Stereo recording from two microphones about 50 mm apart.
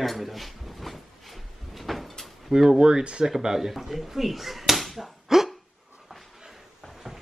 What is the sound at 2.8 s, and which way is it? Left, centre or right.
Speech, centre.